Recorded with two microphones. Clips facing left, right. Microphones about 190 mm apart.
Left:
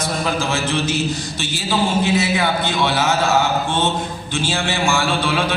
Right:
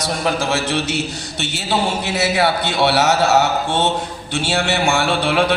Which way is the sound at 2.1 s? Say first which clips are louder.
Right 1 dB; 75° right (ahead or behind).